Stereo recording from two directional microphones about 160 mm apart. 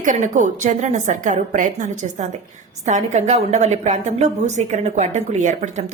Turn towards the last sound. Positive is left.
turn(degrees=-50)  # may be behind; listen again after turning